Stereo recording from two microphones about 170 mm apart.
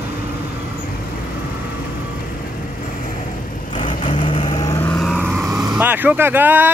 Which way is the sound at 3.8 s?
30° left (ahead or behind).